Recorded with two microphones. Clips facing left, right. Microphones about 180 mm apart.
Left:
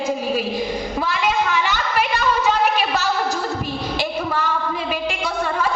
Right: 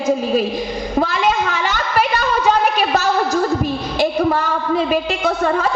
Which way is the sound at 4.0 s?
45° right (ahead or behind).